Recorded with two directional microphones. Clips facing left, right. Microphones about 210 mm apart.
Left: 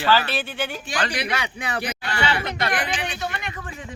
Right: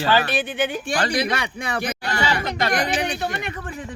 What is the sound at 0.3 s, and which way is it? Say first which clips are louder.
Speech: right 5 dB; 15° right (ahead or behind).